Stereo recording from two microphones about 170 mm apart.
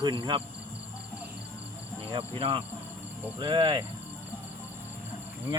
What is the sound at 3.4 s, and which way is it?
Speech, 30° right (ahead or behind).